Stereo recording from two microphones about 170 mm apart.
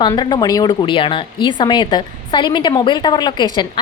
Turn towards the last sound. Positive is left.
turn(degrees=25)  # may be behind; listen again after turning